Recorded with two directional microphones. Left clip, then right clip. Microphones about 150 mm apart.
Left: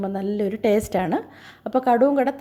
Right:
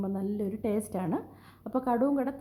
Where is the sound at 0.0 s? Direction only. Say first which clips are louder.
Left 9 dB; 15° left (ahead or behind).